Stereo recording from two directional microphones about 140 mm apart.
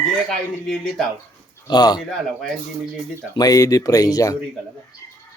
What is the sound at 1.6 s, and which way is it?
Speech, 30° left (ahead or behind).